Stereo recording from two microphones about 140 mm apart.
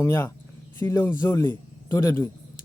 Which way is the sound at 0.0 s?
20° left (ahead or behind).